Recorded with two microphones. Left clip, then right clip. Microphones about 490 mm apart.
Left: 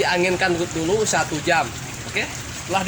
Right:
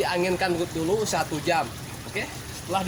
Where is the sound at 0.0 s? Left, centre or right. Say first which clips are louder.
Left 5 dB; right.